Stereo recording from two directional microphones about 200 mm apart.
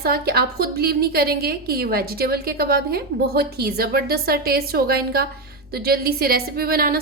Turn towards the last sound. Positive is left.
turn(degrees=-50)  # may be behind; listen again after turning